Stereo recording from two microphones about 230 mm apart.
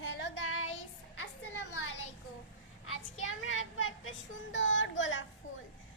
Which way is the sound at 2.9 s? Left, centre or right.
Left.